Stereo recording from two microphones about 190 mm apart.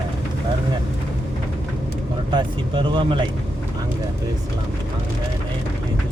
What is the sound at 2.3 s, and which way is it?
Vehicle, 25° right (ahead or behind).